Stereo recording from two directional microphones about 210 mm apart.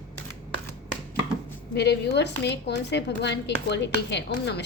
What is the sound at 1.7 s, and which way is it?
A woman's voice, 55° left (ahead or behind).